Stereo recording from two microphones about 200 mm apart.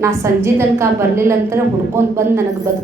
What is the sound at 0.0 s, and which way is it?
A woman's voice, 15° right (ahead or behind).